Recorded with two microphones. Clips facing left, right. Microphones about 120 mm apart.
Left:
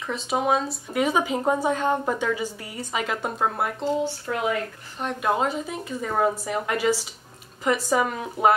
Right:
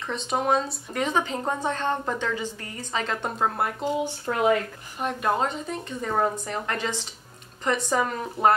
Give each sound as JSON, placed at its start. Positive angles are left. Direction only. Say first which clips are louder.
{"t": 0.0, "sound": "speech", "louder": "left 1 dB", "side_deg": 5}
{"t": 4.3, "sound": "speech", "louder": "right 1 dB", "side_deg": -40}
{"t": 4.9, "sound": "speech", "louder": "left 1 dB", "side_deg": 0}